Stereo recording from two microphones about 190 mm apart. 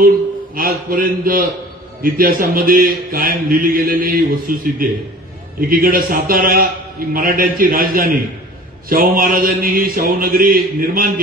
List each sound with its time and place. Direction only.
0.6 s mantra: 50° right (ahead or behind)